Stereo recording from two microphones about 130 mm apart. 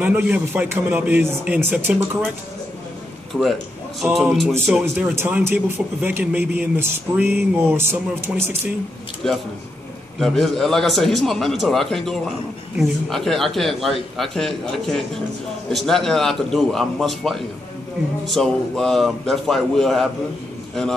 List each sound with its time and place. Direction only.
0.0 s speech: 15° right (ahead or behind)
4.1 s speech: centre (ahead or behind)
4.9 s speech: 15° right (ahead or behind)
9.2 s speech: 5° left (ahead or behind)